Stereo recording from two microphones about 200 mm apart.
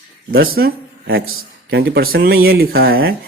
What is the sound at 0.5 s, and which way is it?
Speech, 50° right (ahead or behind).